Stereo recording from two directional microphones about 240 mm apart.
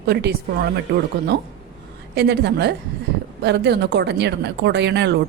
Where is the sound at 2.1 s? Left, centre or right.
Right.